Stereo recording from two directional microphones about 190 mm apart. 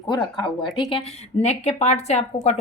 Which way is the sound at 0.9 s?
35° left (ahead or behind).